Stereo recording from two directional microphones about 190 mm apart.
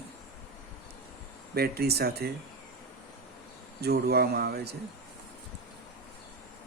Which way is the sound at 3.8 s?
55° right (ahead or behind).